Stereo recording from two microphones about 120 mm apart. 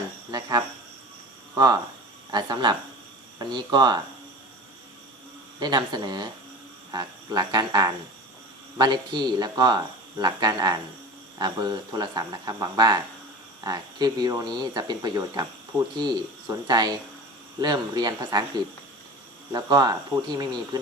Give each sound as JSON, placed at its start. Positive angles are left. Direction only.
{"t": 0.3, "sound": "speech", "side_deg": -35}
{"t": 5.5, "sound": "speech", "side_deg": -35}
{"t": 19.5, "sound": "speech", "side_deg": -35}